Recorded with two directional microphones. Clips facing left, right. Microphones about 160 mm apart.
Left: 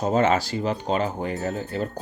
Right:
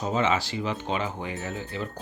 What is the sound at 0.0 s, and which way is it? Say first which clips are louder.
Speech: left 5 dB; 45° left (ahead or behind).